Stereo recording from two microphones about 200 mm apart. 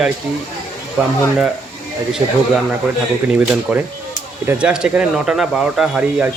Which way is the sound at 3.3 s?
10° right (ahead or behind).